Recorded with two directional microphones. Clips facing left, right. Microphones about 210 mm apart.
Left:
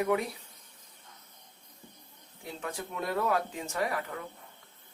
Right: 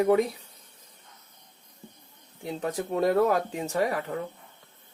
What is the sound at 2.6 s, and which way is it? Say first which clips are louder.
Speech: right 11 dB; 40° right (ahead or behind).